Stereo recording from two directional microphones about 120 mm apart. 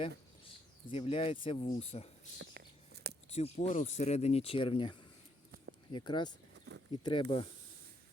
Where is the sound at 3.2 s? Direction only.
65° left (ahead or behind).